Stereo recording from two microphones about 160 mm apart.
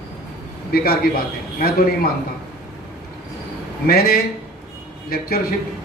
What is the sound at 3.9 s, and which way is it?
Speech, 70° left (ahead or behind).